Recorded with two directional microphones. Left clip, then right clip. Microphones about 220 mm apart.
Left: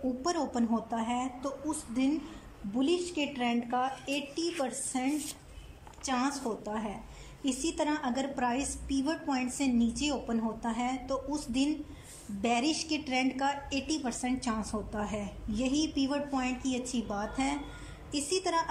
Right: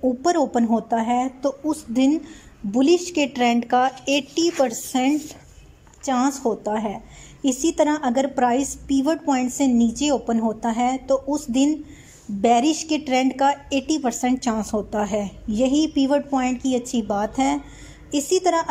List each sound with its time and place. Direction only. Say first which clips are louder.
0.2 s a woman's voice: right 11 dB; 35° right (ahead or behind)